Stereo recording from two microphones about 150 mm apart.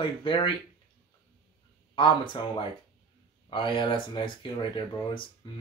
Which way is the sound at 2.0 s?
30° left (ahead or behind).